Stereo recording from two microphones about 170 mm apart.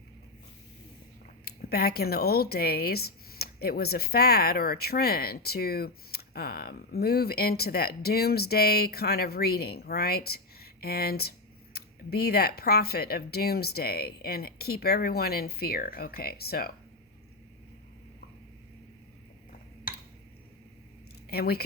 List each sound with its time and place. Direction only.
1.5 s speech: 65° left (ahead or behind)
21.2 s speech: 65° left (ahead or behind)